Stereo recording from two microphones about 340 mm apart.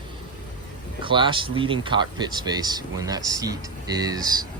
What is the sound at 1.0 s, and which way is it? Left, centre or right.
Speech, centre.